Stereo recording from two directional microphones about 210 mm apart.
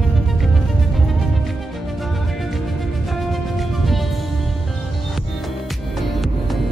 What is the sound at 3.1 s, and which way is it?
Music, centre (ahead or behind).